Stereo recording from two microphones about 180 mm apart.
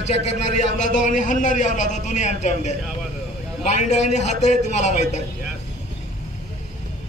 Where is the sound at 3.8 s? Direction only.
40° left (ahead or behind).